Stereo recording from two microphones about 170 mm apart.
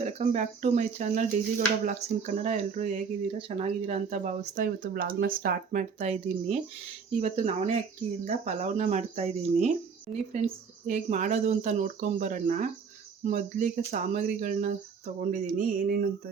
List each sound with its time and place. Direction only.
0.0 s speech: 40° right (ahead or behind); by 5.8 s 60° right (ahead or behind)
6.0 s speech: 40° right (ahead or behind)
10.8 s speech: 45° right (ahead or behind)